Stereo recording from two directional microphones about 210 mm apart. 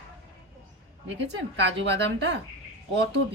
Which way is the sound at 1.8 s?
55° right (ahead or behind).